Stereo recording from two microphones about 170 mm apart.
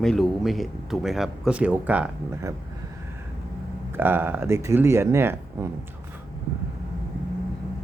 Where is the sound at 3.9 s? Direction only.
10° right (ahead or behind).